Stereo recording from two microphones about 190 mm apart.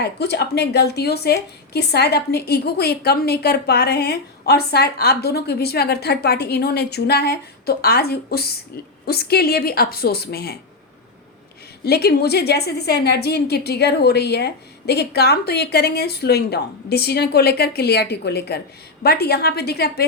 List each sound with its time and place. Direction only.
0.0 s a woman's voice: 60° left (ahead or behind)
11.9 s a woman's voice: 55° left (ahead or behind)